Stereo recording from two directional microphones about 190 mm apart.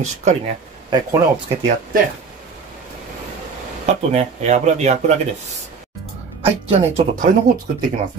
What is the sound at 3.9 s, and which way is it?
Speech, 35° right (ahead or behind).